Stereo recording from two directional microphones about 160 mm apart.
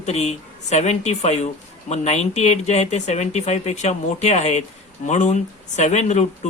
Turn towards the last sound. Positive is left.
turn(degrees=45)  # may be behind; listen again after turning